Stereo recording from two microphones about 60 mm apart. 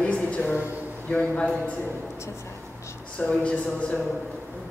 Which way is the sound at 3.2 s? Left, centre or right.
Centre.